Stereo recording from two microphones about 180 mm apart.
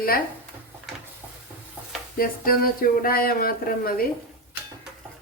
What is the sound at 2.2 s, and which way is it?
Speech, 55° left (ahead or behind).